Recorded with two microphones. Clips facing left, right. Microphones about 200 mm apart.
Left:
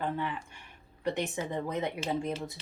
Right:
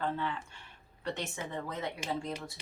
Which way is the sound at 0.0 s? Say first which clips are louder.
Left 1 dB; 15° left (ahead or behind).